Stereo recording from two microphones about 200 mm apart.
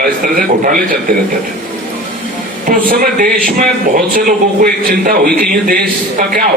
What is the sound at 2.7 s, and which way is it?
A man's voice, 45° right (ahead or behind).